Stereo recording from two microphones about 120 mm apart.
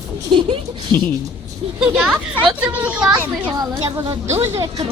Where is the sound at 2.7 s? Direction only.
10° right (ahead or behind).